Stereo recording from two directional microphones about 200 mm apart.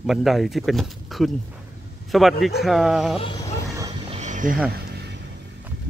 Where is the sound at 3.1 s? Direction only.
25° left (ahead or behind).